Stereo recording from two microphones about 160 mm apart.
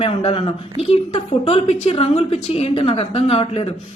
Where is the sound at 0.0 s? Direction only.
40° left (ahead or behind).